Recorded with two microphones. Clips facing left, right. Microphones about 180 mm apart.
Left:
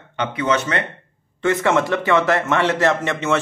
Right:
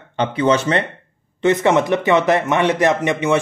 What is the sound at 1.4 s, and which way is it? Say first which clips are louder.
A man's voice: right 3 dB; 20° right (ahead or behind).